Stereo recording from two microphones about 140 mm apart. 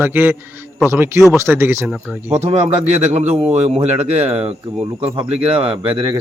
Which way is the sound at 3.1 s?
45° right (ahead or behind).